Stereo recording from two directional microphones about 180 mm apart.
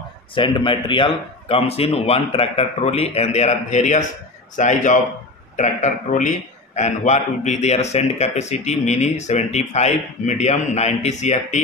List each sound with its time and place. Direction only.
0.3 s a man's voice: 25° left (ahead or behind)